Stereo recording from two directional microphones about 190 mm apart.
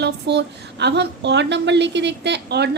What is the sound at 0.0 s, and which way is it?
Speech, 65° right (ahead or behind).